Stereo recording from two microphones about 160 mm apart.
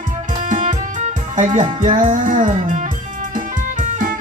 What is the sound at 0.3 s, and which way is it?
Music, 50° right (ahead or behind).